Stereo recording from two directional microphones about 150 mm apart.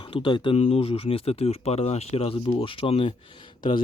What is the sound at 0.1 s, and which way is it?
Speech, 35° left (ahead or behind).